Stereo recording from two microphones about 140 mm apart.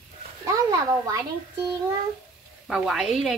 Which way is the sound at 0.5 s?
25° right (ahead or behind).